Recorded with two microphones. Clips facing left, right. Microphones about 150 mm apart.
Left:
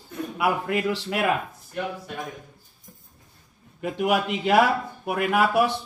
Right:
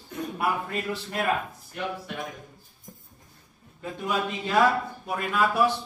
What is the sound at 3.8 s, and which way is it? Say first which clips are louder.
A man's voice: left 6 dB; 75° left (ahead or behind).